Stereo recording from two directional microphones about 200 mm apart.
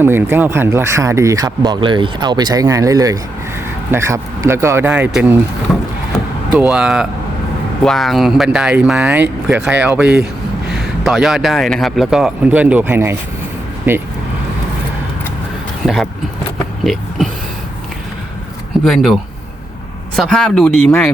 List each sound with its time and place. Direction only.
0.0 s speech: 10° right (ahead or behind)
6.6 s speech: 5° right (ahead or behind)
16.8 s a sound: centre (ahead or behind)
18.9 s speech: centre (ahead or behind)